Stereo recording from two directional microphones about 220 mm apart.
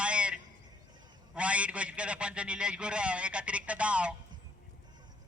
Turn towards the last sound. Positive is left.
turn(degrees=-5)  # may be behind; listen again after turning